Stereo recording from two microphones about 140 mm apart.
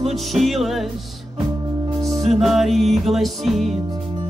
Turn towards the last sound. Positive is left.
turn(degrees=0)  # may be behind; listen again after turning